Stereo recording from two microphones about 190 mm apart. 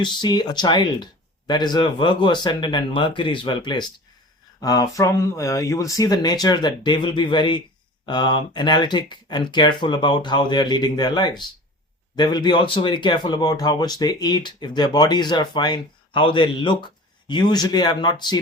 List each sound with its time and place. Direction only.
0.0 s speech: 25° left (ahead or behind)